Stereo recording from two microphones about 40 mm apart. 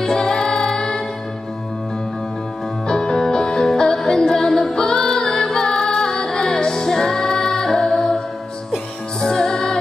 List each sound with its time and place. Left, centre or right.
0.0 s music: centre
2.9 s music: centre